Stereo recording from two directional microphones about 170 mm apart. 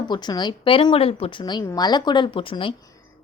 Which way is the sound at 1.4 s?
20° left (ahead or behind).